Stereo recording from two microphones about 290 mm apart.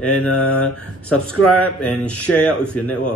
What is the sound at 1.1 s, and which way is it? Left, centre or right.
Speech, left.